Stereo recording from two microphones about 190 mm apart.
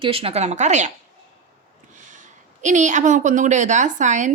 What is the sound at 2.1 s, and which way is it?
A woman's voice, 40° right (ahead or behind).